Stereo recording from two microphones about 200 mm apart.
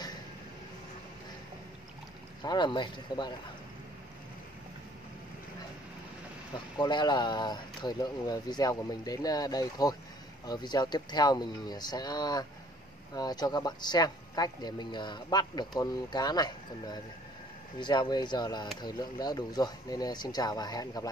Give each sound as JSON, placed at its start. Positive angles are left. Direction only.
{"t": 2.4, "sound": "speech", "side_deg": 20}
{"t": 6.5, "sound": "speech", "side_deg": 20}